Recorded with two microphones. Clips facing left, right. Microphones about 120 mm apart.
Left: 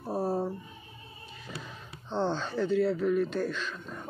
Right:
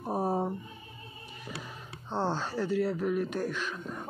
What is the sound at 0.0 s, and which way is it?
Music, 15° right (ahead or behind).